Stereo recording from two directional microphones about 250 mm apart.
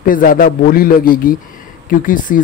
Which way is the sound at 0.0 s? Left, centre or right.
Left.